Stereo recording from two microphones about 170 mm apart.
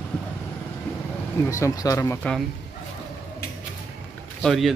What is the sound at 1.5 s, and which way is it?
Speech, 20° left (ahead or behind).